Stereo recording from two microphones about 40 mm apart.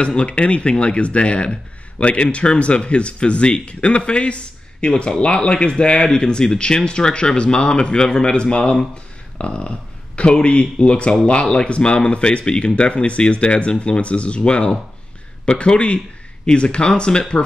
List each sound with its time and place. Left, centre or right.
0.0 s speech: left